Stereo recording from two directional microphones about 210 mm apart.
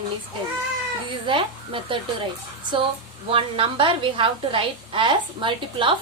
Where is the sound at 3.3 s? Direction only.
25° right (ahead or behind).